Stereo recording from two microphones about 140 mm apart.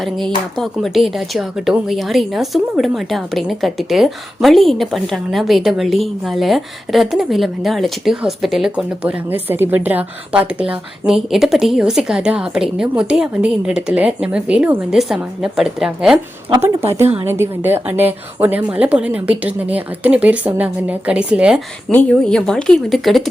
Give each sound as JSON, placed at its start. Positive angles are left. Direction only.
{"t": 0.0, "sound": "speech", "side_deg": 0}
{"t": 16.5, "sound": "speech", "side_deg": -20}
{"t": 21.9, "sound": "speech", "side_deg": 5}